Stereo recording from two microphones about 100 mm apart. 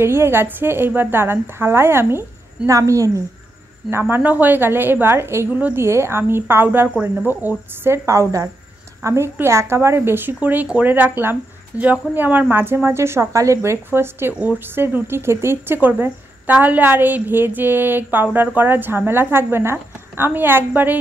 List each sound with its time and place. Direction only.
0.0 s speech: 25° right (ahead or behind)
4.1 s speech: 15° right (ahead or behind)